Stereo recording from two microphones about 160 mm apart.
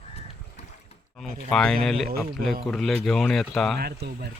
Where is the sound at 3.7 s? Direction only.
85° right.